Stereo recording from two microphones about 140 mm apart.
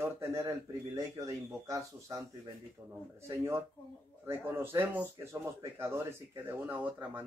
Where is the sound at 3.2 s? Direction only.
20° right (ahead or behind).